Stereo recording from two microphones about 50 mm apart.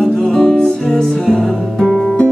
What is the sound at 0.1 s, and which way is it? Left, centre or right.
Music, centre.